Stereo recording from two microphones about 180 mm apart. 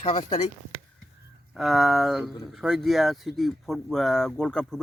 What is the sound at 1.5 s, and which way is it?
Speech, centre (ahead or behind).